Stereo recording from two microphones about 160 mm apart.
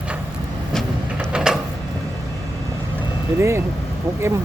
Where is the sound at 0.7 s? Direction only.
5° right (ahead or behind).